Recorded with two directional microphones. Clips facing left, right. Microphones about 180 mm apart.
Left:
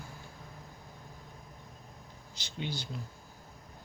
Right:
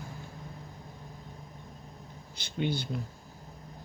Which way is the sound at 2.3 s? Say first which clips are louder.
Right 7 dB; 55° right (ahead or behind).